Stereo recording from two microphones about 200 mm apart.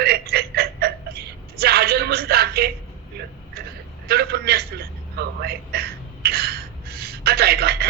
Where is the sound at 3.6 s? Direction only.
50° right (ahead or behind).